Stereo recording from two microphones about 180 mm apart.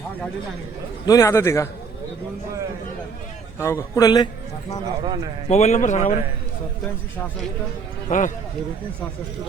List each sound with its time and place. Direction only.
1.0 s a man's voice: 15° left (ahead or behind)
3.6 s a man's voice: 15° left (ahead or behind)
5.0 s a man's voice: 25° right (ahead or behind)
5.5 s a man's voice: 40° left (ahead or behind)
8.1 s a man's voice: 45° left (ahead or behind)